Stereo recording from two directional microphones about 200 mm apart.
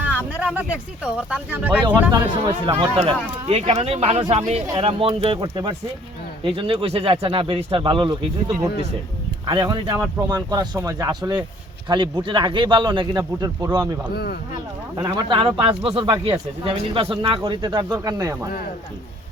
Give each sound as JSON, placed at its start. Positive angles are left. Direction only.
{"t": 0.0, "sound": "speech", "side_deg": -10}
{"t": 2.1, "sound": "speech", "side_deg": -20}
{"t": 14.1, "sound": "speech", "side_deg": 50}
{"t": 14.9, "sound": "speech", "side_deg": -20}